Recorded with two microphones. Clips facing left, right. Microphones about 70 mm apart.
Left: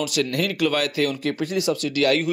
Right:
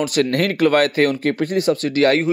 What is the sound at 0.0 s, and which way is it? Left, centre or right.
Speech, right.